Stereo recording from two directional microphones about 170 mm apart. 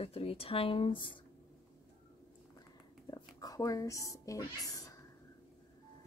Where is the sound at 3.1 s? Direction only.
20° left (ahead or behind).